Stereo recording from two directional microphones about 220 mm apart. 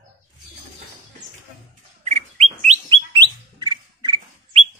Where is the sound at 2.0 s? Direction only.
30° right (ahead or behind).